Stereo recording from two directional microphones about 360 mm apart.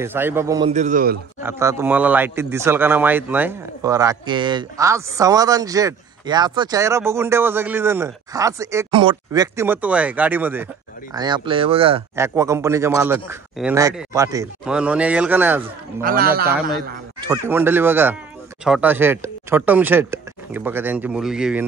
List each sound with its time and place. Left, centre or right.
0.0 s a man's voice: centre; by 1.2 s right
1.4 s a man's voice: centre
16.0 s speech: right
17.3 s speech: centre